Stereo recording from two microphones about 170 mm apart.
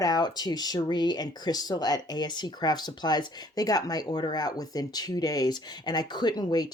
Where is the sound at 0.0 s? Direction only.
25° left (ahead or behind).